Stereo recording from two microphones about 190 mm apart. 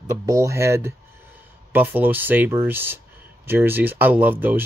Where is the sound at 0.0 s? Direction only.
15° right (ahead or behind).